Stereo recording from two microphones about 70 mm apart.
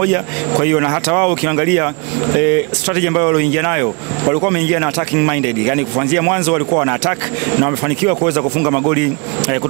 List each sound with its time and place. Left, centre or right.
0.0 s speech: right